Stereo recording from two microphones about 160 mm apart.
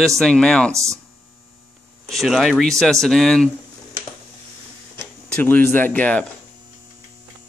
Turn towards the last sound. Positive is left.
turn(degrees=10)  # may be behind; listen again after turning